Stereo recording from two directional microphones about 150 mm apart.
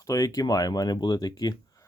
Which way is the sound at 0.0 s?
20° left (ahead or behind).